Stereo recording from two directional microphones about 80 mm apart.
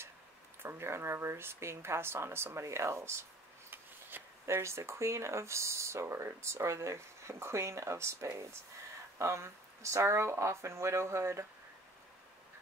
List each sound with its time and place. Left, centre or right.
0.6 s speech: right